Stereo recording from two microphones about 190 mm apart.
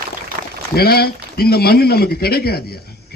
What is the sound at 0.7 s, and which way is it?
A man's voice, 55° left (ahead or behind).